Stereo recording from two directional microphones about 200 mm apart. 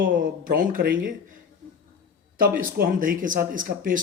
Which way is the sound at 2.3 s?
45° right (ahead or behind).